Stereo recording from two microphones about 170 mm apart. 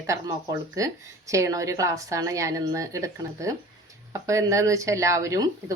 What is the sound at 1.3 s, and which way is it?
A woman's voice, 20° right (ahead or behind).